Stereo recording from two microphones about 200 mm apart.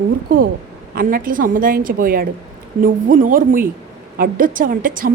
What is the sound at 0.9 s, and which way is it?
A woman's voice, 45° right (ahead or behind).